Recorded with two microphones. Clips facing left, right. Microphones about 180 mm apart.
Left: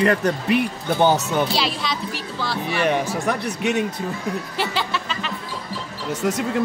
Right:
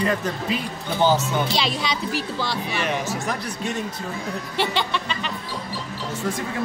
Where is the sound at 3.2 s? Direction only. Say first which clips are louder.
Left 5 dB; 70° left (ahead or behind).